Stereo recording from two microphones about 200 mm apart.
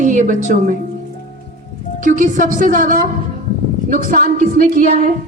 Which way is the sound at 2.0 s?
40° right (ahead or behind).